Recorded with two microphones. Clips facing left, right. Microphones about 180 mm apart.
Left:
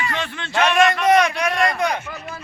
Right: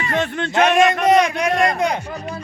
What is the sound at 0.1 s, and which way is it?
Speech, 50° right (ahead or behind).